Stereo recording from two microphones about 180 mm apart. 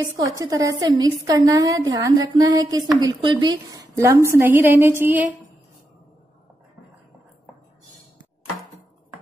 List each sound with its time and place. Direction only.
0.0 s a woman's voice: 20° right (ahead or behind)